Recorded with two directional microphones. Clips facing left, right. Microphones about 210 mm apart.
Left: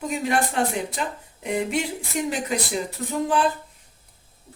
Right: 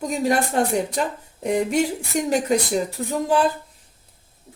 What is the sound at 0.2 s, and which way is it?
A woman's voice, 40° right (ahead or behind).